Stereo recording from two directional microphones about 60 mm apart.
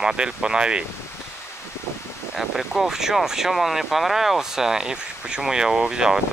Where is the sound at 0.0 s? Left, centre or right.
Centre.